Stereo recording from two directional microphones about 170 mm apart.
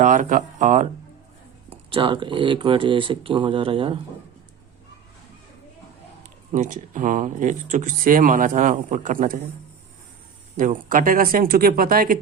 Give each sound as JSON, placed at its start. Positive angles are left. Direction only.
{"t": 0.0, "sound": "speech", "side_deg": -50}
{"t": 1.7, "sound": "speech", "side_deg": -30}
{"t": 6.5, "sound": "speech", "side_deg": -50}
{"t": 10.6, "sound": "speech", "side_deg": -50}